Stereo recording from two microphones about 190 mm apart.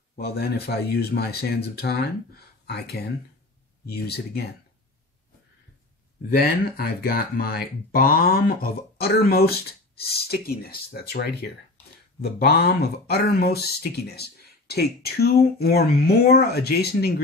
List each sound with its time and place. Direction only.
0.1 s speech: 55° left (ahead or behind)
6.3 s speech: 55° left (ahead or behind)